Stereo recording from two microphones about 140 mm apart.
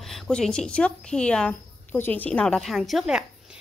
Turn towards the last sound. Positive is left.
turn(degrees=-5)  # may be behind; listen again after turning